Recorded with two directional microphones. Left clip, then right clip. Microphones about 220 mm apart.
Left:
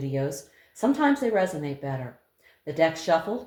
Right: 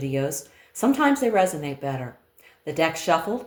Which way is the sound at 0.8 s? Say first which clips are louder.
Right 2 dB; 35° right (ahead or behind).